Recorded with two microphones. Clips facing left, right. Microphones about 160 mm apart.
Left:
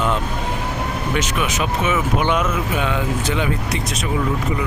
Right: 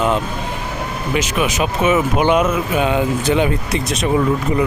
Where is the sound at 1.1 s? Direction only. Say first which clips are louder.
Right 5 dB; 15° right (ahead or behind).